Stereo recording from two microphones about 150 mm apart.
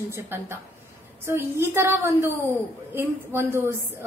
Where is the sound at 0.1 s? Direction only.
15° right (ahead or behind).